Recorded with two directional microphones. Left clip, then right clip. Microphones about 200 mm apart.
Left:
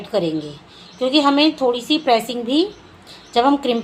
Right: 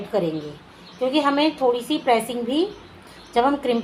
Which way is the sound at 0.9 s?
30° left (ahead or behind).